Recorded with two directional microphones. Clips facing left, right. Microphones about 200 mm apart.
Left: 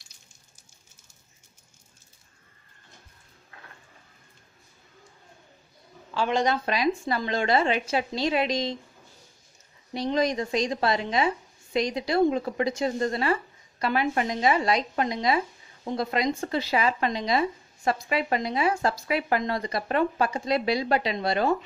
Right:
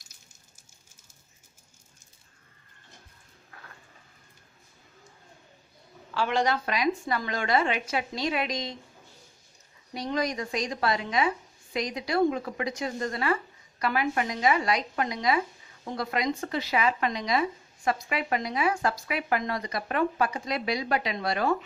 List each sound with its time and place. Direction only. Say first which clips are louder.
6.1 s a woman's voice: left 2 dB; 20° left (ahead or behind)
9.9 s a woman's voice: left 4 dB; 25° left (ahead or behind)